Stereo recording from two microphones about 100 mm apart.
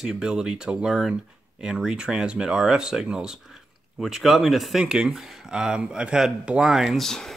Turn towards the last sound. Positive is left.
turn(degrees=5)  # may be behind; listen again after turning